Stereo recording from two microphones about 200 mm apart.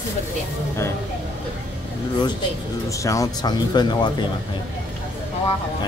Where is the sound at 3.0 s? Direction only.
20° left (ahead or behind).